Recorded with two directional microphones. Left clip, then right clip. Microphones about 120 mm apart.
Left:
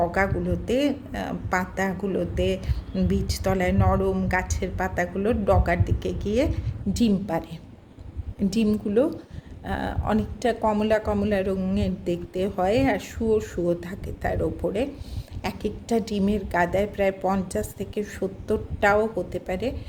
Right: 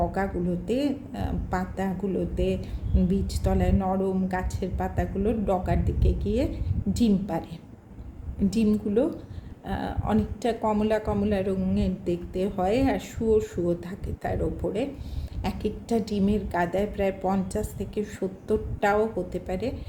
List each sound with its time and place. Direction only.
0.0 s a woman's voice: 30° left (ahead or behind)
8.4 s a woman's voice: 25° left (ahead or behind)
14.6 s speech: 65° left (ahead or behind)
15.4 s a woman's voice: 30° left (ahead or behind)